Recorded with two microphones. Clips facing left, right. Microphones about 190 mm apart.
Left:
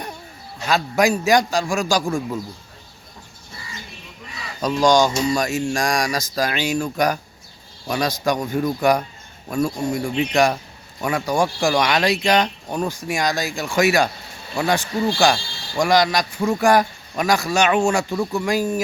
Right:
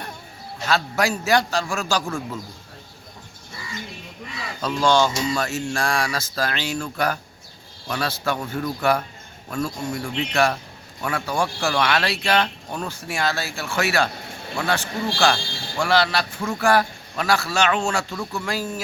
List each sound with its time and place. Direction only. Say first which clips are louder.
0.7 s speech: left 4 dB; 15° left (ahead or behind)
4.6 s speech: left 3 dB; 15° left (ahead or behind)